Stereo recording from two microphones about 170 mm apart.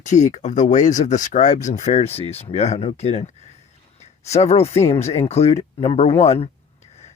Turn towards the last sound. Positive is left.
turn(degrees=35)  # may be behind; listen again after turning